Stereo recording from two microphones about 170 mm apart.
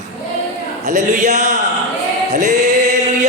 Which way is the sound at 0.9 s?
45° right (ahead or behind).